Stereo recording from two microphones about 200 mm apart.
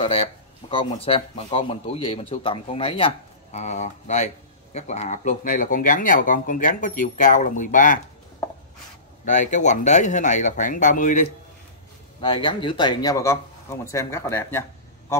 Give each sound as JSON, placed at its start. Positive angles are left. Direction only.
{"t": 0.0, "sound": "speech", "side_deg": 25}
{"t": 9.2, "sound": "speech", "side_deg": 40}
{"t": 12.2, "sound": "speech", "side_deg": 25}